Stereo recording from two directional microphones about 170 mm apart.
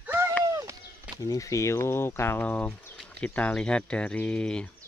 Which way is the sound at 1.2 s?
20° left (ahead or behind).